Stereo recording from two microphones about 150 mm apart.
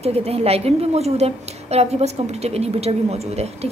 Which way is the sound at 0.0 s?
45° right (ahead or behind).